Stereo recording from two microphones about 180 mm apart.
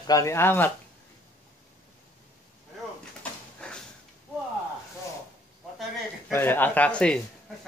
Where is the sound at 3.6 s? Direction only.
5° left (ahead or behind).